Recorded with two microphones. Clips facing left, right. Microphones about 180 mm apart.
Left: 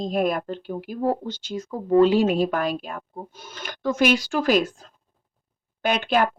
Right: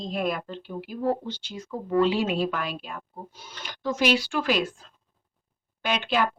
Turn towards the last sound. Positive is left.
turn(degrees=45)  # may be behind; listen again after turning